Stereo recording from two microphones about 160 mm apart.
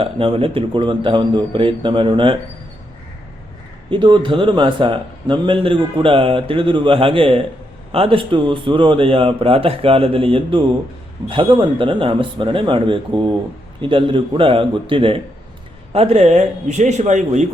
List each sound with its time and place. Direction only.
0.0 s a man's voice: 35° right (ahead or behind)
3.8 s a man's voice: 30° right (ahead or behind); by 17.4 s 45° right (ahead or behind)